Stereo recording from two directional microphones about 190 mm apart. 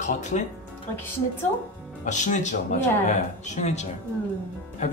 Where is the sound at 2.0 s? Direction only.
40° left (ahead or behind).